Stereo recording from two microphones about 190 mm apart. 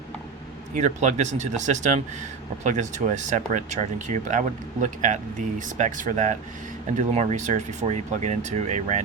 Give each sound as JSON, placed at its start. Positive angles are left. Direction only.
{"t": 0.8, "sound": "speech", "side_deg": -40}